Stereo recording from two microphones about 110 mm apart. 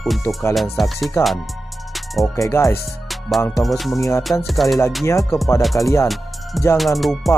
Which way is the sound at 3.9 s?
30° left (ahead or behind).